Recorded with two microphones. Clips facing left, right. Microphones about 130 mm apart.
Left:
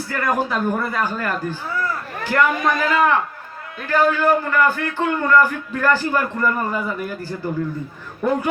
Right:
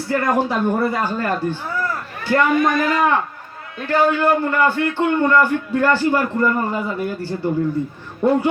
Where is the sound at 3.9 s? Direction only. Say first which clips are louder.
Right 1 dB; 25° right (ahead or behind).